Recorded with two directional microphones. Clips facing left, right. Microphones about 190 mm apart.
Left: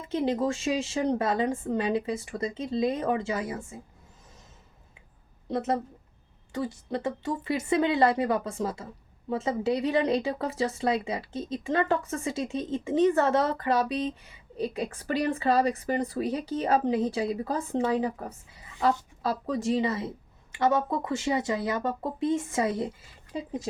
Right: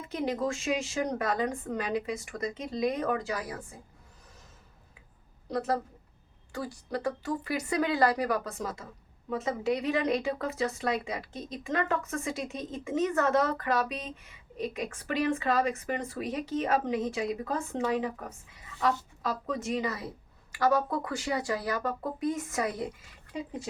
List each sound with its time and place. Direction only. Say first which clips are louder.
0.1 s a woman's voice: left 4 dB; 30° left (ahead or behind)
5.5 s a woman's voice: left 2 dB; 20° left (ahead or behind)